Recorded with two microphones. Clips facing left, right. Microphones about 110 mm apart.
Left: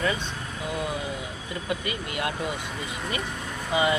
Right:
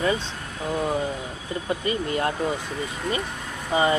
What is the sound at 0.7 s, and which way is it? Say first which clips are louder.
Speech: right 6 dB; 40° right (ahead or behind).